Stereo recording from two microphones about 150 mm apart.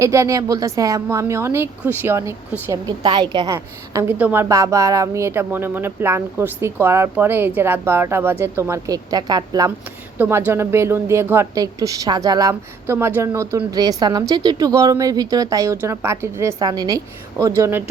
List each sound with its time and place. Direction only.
0.0 s a woman's voice: 20° right (ahead or behind)
10.2 s a woman's voice: 15° right (ahead or behind)